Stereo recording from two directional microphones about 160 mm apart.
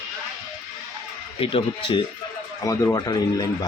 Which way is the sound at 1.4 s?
35° left (ahead or behind).